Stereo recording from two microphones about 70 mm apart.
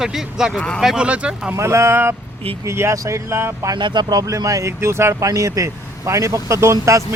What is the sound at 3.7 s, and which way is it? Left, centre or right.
Speech, right.